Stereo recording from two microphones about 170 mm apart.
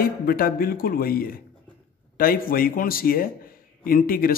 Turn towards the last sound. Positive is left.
turn(degrees=60)  # may be behind; listen again after turning